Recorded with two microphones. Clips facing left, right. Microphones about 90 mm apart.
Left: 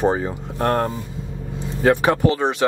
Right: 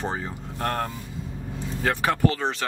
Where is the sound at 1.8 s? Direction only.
20° left (ahead or behind).